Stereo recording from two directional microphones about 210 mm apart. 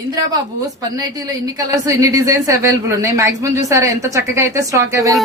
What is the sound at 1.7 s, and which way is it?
A woman's voice, 15° right (ahead or behind).